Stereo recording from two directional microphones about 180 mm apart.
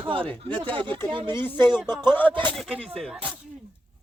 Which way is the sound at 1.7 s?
5° right (ahead or behind).